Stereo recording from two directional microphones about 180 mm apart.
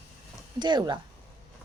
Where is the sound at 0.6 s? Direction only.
25° right (ahead or behind).